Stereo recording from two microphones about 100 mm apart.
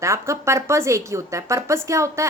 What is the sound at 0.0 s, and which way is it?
A woman's voice, 30° right (ahead or behind).